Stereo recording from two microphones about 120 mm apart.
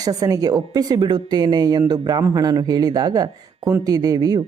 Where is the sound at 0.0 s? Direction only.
30° right (ahead or behind).